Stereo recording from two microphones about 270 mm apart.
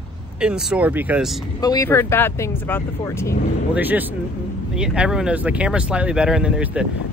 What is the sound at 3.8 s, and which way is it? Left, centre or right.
Speech, centre.